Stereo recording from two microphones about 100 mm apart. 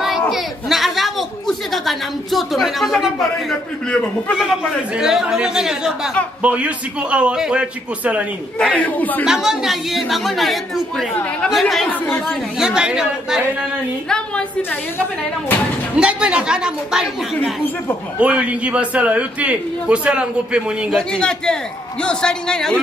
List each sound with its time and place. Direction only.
0.3 s a sound: centre (ahead or behind)
4.4 s a woman's voice: 5° right (ahead or behind)
8.5 s a man's voice: 10° left (ahead or behind)
9.2 s a woman's voice: 5° right (ahead or behind)
12.6 s a man's voice: 10° right (ahead or behind)
14.0 s a man's voice: 10° left (ahead or behind)
16.0 s a man's voice: 10° right (ahead or behind)
18.2 s a man's voice: 10° right (ahead or behind)
21.2 s a man's voice: 10° left (ahead or behind)